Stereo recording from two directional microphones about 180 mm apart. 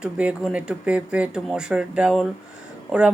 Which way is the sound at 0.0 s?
5° right (ahead or behind).